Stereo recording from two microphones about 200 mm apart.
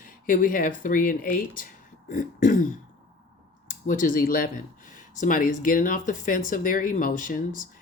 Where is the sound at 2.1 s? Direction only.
40° left (ahead or behind).